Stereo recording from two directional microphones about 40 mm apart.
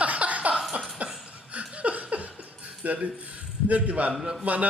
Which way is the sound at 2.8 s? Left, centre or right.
Right.